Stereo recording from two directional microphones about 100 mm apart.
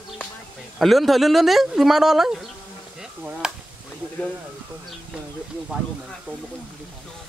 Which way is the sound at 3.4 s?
5° right (ahead or behind).